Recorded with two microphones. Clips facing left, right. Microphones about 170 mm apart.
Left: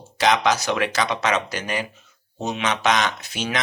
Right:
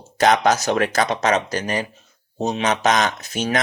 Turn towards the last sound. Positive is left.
turn(degrees=-45)  # may be behind; listen again after turning